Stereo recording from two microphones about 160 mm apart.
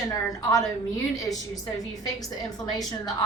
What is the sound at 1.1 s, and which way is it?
Speech, 20° left (ahead or behind).